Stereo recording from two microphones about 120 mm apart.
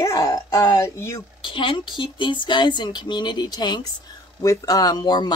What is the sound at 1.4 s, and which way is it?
Speech, 45° left (ahead or behind).